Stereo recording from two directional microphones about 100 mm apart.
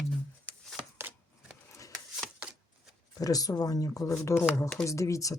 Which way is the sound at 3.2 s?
35° left (ahead or behind).